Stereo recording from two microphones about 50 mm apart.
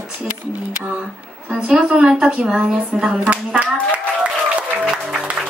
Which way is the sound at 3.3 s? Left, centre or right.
Right.